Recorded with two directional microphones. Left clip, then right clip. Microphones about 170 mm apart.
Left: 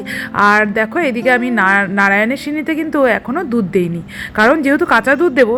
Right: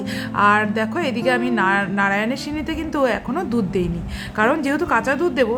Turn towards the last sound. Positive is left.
turn(degrees=20)  # may be behind; listen again after turning